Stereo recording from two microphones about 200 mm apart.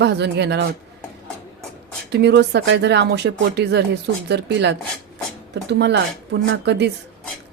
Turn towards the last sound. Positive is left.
turn(degrees=-60)  # may be behind; listen again after turning